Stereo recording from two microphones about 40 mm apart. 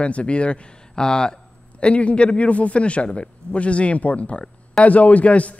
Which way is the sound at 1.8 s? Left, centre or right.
Left.